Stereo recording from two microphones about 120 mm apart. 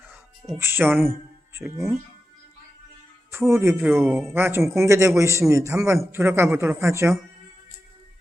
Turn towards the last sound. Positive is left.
turn(degrees=-25)  # may be behind; listen again after turning